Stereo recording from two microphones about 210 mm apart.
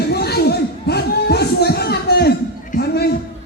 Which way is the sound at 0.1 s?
50° left (ahead or behind).